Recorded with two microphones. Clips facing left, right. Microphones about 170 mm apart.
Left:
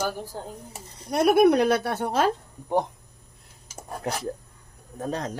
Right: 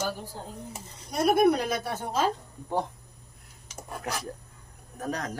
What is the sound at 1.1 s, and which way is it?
A woman's voice, 70° left (ahead or behind).